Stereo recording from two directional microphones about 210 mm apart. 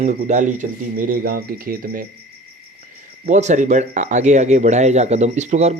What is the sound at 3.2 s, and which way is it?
Speech, 35° right (ahead or behind).